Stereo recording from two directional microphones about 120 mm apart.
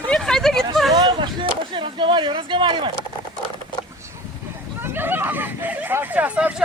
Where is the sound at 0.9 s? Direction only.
35° right (ahead or behind).